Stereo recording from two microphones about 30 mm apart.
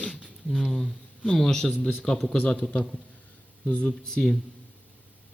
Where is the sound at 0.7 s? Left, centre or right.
Centre.